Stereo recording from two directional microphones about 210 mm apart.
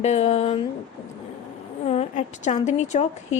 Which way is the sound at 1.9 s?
30° left (ahead or behind).